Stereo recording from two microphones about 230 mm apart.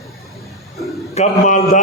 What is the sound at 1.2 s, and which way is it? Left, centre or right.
Speech, left.